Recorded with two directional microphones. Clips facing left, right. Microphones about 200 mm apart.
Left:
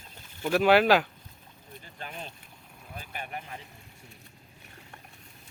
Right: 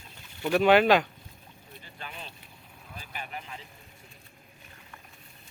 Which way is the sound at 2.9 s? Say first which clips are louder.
Left 2 dB; 50° left (ahead or behind).